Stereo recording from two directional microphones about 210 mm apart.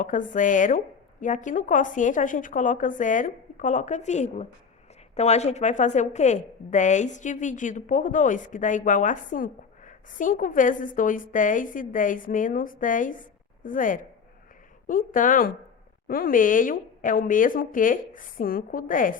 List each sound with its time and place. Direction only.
0.0 s a woman's voice: 40° left (ahead or behind)